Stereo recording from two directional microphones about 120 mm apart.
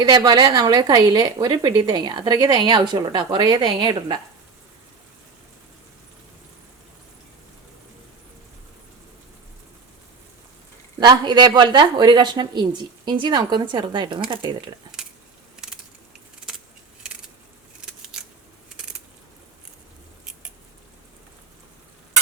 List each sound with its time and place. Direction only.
0.0 s a woman's voice: 35° right (ahead or behind)
11.0 s a woman's voice: 35° right (ahead or behind)
17.7 s scissors: 5° right (ahead or behind)